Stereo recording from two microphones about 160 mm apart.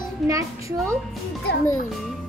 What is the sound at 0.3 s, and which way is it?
Speech, 20° right (ahead or behind).